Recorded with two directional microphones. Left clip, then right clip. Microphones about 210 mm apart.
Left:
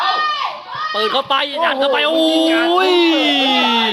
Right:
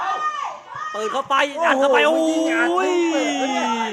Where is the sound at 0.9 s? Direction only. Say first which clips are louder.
Left 3 dB; 10° left (ahead or behind).